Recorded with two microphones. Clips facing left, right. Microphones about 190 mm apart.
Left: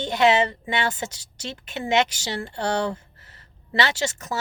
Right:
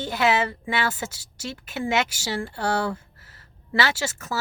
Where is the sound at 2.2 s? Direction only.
20° left (ahead or behind).